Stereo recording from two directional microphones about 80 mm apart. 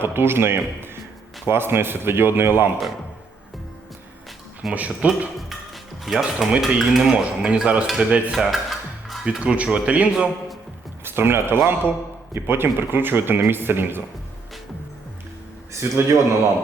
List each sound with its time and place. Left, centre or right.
0.0 s speech: right
4.6 s speech: centre
5.0 s cutlery: centre
5.4 s music: centre
6.6 s cutlery: centre
8.4 s music: centre
9.2 s cutlery: centre
11.0 s a man's voice: right
15.7 s a man's voice: right